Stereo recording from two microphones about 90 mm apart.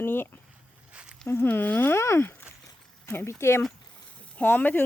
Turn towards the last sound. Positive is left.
turn(degrees=20)  # may be behind; listen again after turning